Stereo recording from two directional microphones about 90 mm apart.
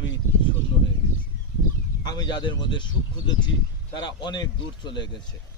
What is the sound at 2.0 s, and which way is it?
Speech, 55° left (ahead or behind).